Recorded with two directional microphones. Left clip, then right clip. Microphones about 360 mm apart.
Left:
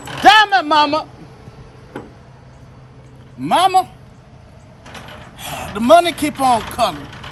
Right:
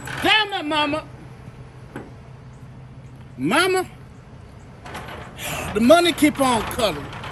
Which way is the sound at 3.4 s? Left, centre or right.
Left.